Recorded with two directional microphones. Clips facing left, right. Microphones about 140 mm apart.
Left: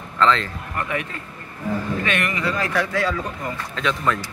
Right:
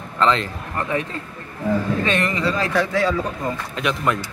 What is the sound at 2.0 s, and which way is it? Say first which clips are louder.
Speech: right 3 dB; 30° right (ahead or behind).